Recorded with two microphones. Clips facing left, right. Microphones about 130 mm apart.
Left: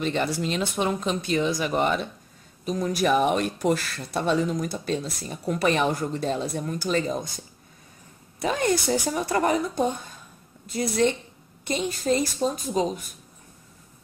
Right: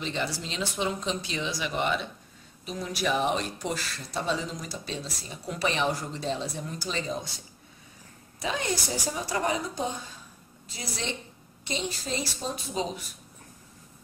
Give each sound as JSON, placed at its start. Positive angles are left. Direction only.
{"t": 0.0, "sound": "speech", "side_deg": 55}